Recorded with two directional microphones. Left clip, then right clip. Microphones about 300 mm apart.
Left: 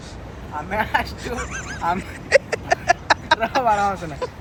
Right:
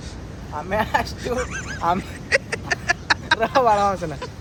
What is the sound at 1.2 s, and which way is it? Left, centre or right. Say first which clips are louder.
Speech: right 3 dB; centre.